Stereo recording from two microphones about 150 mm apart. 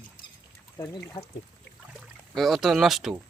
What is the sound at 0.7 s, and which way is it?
Speech, 20° left (ahead or behind).